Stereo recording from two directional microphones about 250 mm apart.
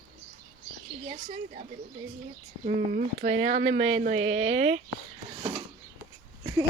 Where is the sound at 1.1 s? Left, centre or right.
Right.